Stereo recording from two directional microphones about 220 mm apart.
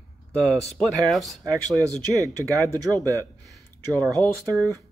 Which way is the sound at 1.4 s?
15° right (ahead or behind).